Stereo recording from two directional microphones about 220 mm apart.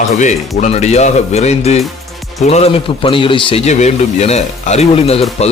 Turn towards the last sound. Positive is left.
turn(degrees=30)  # may be behind; listen again after turning